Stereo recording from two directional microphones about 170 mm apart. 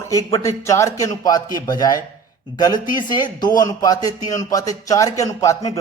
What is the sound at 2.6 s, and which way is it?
A man's voice, 25° left (ahead or behind).